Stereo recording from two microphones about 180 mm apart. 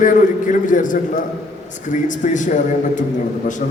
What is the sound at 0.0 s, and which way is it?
A man's voice, 45° left (ahead or behind).